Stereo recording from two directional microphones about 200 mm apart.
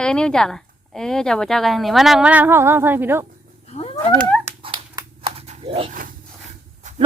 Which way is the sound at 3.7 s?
30° left (ahead or behind).